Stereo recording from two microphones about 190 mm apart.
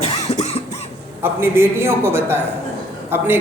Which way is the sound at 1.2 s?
10° right (ahead or behind).